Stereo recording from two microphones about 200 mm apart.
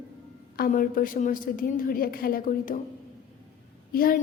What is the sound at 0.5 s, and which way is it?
A woman's voice, 45° left (ahead or behind).